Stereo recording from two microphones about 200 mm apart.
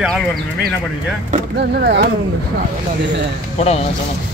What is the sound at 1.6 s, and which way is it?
Speech, 55° right (ahead or behind).